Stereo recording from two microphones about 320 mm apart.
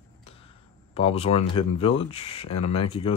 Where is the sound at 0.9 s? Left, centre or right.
Centre.